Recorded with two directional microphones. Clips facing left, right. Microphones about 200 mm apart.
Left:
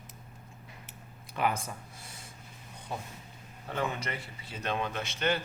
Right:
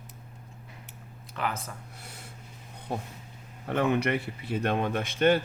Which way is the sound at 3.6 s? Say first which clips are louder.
Right 8 dB; 60° right (ahead or behind).